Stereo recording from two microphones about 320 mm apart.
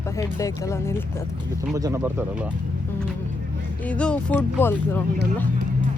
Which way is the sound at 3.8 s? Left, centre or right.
Centre.